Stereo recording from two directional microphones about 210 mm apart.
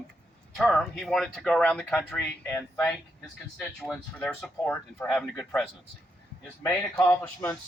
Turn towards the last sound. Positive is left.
turn(degrees=10)  # may be behind; listen again after turning